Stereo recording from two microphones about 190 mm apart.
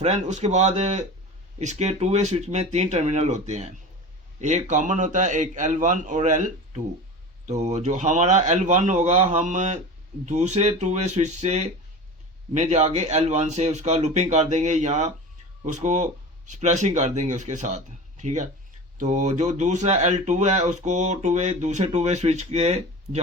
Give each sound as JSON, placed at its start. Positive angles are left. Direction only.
{"t": 0.0, "sound": "speech", "side_deg": -40}